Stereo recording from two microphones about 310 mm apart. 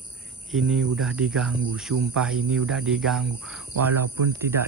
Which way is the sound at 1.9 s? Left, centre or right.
Right.